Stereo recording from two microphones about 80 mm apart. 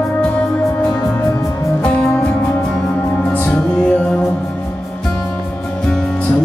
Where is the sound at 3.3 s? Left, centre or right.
Left.